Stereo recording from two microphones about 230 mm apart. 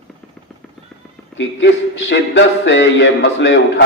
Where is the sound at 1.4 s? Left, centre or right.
Left.